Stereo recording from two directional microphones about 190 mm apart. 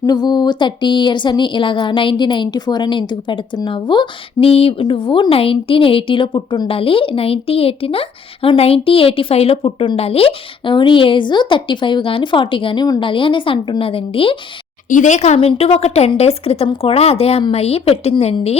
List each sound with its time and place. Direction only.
0.0 s speech: 20° left (ahead or behind)
14.8 s a woman's voice: 40° left (ahead or behind)